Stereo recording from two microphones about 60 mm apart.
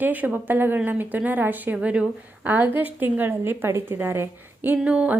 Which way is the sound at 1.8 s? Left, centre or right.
Centre.